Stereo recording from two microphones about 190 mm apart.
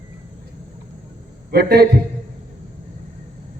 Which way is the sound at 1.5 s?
55° right (ahead or behind).